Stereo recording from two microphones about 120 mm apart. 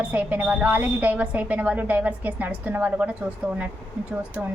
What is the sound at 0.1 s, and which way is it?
A woman's voice, 15° right (ahead or behind).